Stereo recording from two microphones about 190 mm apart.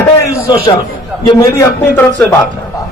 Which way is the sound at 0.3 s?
15° left (ahead or behind).